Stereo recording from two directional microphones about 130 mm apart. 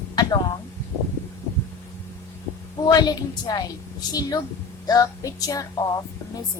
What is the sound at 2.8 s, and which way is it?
A woman's voice, 30° left (ahead or behind).